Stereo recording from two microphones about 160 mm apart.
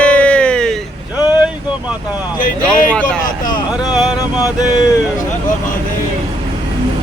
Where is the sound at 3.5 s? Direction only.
25° left (ahead or behind).